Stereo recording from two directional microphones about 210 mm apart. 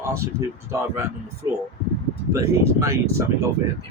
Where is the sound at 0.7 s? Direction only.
15° right (ahead or behind).